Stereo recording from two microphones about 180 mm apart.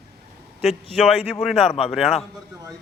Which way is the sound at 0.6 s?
Centre (ahead or behind).